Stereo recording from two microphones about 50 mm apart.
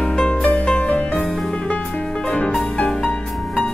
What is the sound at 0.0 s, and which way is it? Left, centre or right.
Music, left.